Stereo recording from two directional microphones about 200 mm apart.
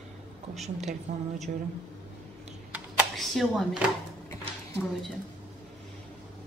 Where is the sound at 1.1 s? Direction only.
35° right (ahead or behind).